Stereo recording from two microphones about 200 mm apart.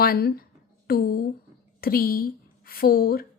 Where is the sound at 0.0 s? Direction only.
50° left (ahead or behind).